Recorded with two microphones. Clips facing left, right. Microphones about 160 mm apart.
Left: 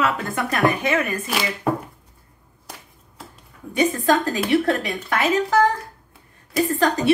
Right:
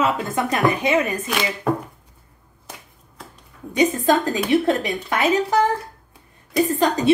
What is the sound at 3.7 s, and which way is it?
A woman's voice, 20° right (ahead or behind).